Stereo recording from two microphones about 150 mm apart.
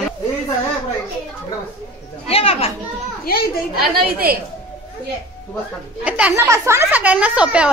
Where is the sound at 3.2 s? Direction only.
90° left.